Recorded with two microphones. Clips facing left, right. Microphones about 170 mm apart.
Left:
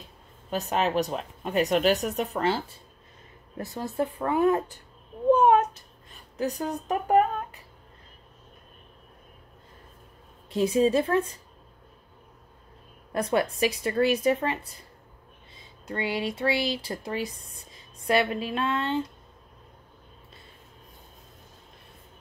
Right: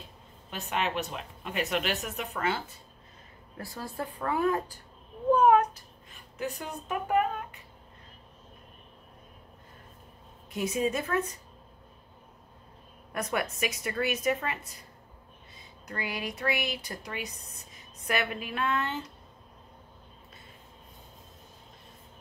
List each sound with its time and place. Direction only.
0.5 s speech: 40° left (ahead or behind)
3.5 s speech: 20° left (ahead or behind)
5.3 s a sound: 25° left (ahead or behind)
6.3 s speech: 40° left (ahead or behind)
10.5 s speech: 30° left (ahead or behind)
13.1 s speech: 30° left (ahead or behind)
17.2 s speech: 20° right (ahead or behind)
18.0 s speech: 25° left (ahead or behind)